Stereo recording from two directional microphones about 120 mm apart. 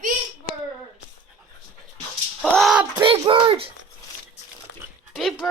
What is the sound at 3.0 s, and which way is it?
Speech, 45° right (ahead or behind).